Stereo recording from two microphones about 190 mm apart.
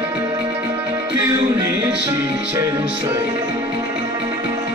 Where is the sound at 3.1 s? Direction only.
15° right (ahead or behind).